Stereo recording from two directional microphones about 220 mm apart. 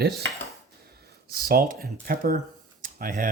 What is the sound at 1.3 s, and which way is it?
Speech, 45° right (ahead or behind).